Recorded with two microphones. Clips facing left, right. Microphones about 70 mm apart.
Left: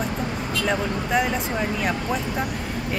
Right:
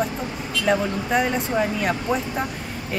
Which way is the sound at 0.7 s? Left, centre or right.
Centre.